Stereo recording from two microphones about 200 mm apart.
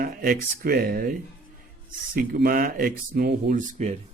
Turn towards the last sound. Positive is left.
turn(degrees=-35)  # may be behind; listen again after turning